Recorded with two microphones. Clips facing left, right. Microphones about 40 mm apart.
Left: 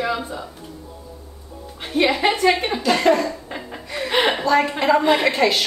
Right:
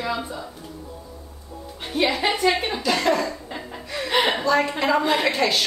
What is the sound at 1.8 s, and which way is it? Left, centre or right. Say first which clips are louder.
A woman's voice: left 4 dB; centre.